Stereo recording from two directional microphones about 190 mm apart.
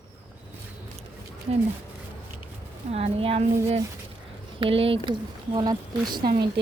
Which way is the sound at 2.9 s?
30° right (ahead or behind).